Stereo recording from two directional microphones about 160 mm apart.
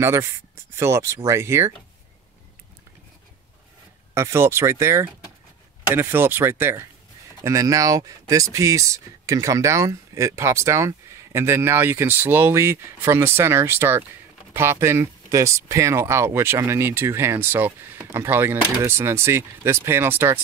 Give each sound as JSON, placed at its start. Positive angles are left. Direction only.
{"t": 0.0, "sound": "speech", "side_deg": -15}
{"t": 4.1, "sound": "speech", "side_deg": -15}